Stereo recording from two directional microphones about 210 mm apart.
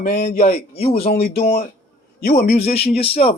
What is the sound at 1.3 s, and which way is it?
A man's voice, 45° left (ahead or behind).